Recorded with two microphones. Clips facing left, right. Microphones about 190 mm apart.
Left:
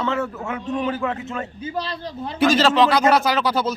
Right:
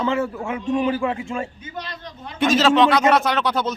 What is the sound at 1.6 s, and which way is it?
Speech, 30° left (ahead or behind).